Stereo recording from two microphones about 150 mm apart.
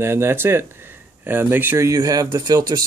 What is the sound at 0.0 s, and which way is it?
Speech, 15° right (ahead or behind).